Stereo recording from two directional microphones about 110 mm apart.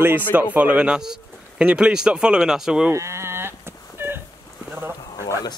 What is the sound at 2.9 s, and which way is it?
Sheep, 25° right (ahead or behind).